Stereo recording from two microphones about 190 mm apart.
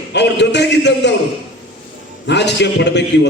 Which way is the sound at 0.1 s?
65° left (ahead or behind).